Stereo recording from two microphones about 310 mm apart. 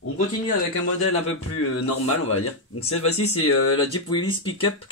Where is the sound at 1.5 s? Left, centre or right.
Left.